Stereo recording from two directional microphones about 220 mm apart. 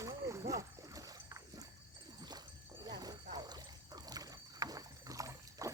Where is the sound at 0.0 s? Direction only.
15° right (ahead or behind).